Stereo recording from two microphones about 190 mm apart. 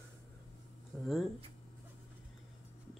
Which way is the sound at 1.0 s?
Centre (ahead or behind).